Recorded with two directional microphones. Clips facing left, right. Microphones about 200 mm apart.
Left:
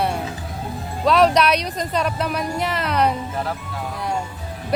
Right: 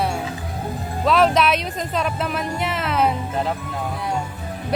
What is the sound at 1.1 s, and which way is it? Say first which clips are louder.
Speech: left 1 dB; centre (ahead or behind).